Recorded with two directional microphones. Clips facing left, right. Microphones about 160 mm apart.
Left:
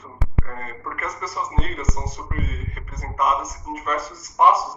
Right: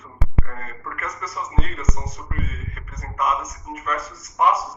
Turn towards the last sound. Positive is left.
turn(degrees=30)  # may be behind; listen again after turning